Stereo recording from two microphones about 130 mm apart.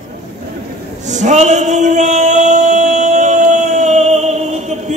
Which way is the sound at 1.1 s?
65° right (ahead or behind).